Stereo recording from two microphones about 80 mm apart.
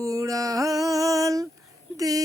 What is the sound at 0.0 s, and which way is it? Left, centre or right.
Music, right.